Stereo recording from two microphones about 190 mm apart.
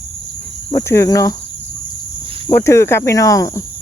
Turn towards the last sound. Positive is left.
turn(degrees=15)  # may be behind; listen again after turning